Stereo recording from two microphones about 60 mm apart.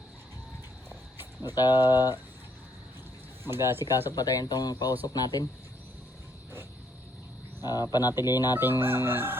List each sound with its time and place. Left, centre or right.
1.4 s speech: left
3.4 s chicken: right
4.1 s speech: left
7.6 s speech: left
8.8 s chicken: right